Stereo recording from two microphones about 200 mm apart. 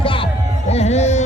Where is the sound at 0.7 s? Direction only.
35° left (ahead or behind).